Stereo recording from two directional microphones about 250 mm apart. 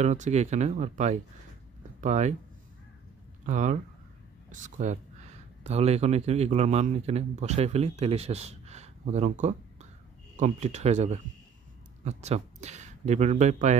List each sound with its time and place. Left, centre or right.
0.0 s a man's voice: right
3.4 s a man's voice: right